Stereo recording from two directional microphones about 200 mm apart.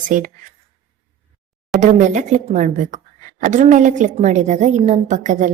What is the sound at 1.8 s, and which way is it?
A woman's voice, 35° right (ahead or behind).